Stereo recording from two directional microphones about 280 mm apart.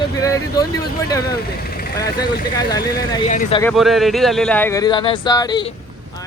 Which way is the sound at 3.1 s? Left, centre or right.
Left.